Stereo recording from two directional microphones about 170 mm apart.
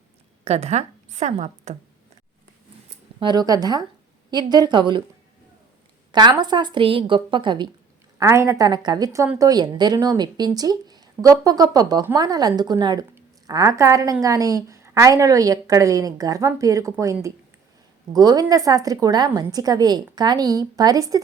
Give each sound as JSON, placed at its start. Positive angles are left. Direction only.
{"t": 0.4, "sound": "a woman's voice", "side_deg": -40}
{"t": 3.2, "sound": "a woman's voice", "side_deg": -25}
{"t": 6.1, "sound": "a woman's voice", "side_deg": -25}